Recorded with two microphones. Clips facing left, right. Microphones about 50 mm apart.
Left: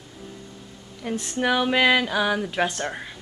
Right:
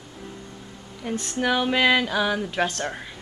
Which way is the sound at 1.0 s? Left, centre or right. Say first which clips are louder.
Left 1 dB; centre.